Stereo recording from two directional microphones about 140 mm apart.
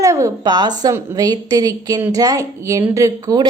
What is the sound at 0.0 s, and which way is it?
A woman's voice, 20° right (ahead or behind).